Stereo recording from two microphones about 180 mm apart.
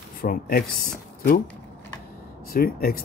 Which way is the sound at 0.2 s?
55° left (ahead or behind).